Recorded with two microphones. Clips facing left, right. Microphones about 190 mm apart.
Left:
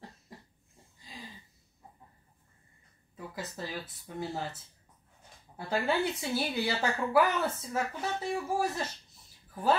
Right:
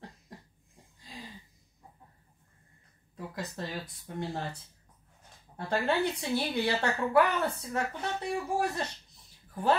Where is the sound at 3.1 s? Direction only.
5° left (ahead or behind).